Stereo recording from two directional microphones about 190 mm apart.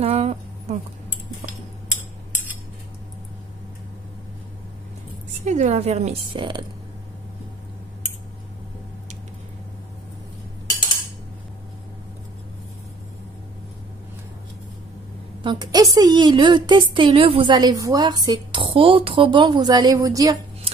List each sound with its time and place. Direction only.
0.0 s a sound: 35° right (ahead or behind)
5.4 s a woman's voice: 40° right (ahead or behind)
15.4 s a woman's voice: 20° right (ahead or behind)